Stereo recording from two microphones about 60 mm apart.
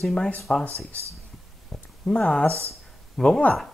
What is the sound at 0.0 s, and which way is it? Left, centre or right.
Speech, centre.